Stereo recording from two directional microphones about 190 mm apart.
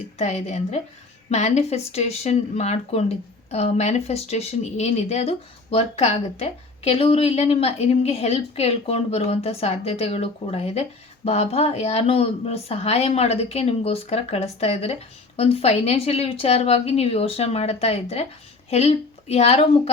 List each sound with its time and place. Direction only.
0.2 s a woman's voice: 35° left (ahead or behind)